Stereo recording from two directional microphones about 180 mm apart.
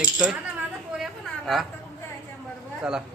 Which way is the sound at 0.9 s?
Centre (ahead or behind).